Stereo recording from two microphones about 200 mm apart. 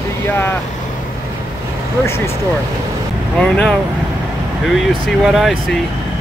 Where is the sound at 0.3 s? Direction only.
10° left (ahead or behind).